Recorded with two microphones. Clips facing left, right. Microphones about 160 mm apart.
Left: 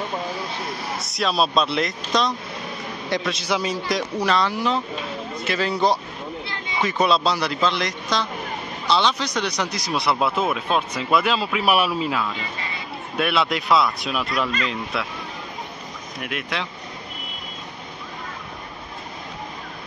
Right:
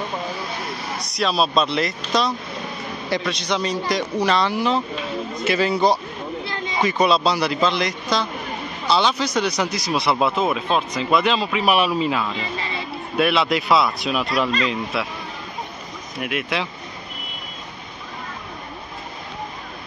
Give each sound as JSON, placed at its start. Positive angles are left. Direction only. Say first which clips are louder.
{"t": 0.9, "sound": "speech", "louder": "right 1 dB", "side_deg": 0}
{"t": 16.2, "sound": "speech", "louder": "right 4 dB", "side_deg": -5}